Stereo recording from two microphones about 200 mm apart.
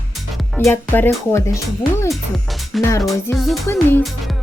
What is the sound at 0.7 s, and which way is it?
Speech, 10° left (ahead or behind).